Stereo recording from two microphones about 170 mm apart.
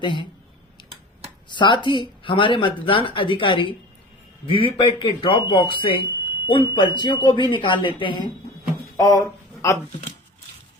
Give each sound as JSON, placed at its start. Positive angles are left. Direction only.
{"t": 0.0, "sound": "speech", "side_deg": 30}
{"t": 1.5, "sound": "speech", "side_deg": 25}
{"t": 9.0, "sound": "speech", "side_deg": 20}